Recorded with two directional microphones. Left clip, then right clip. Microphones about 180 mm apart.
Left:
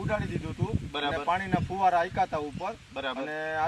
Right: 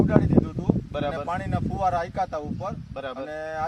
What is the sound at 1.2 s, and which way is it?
Speech, 15° right (ahead or behind).